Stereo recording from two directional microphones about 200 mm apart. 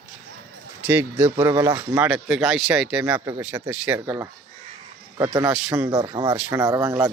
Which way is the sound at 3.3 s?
15° right (ahead or behind).